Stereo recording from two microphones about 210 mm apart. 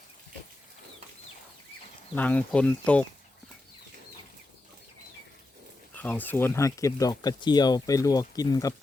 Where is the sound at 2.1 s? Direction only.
5° left (ahead or behind).